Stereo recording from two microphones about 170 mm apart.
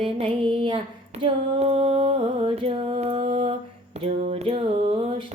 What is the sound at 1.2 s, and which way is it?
Mantra, 35° right (ahead or behind).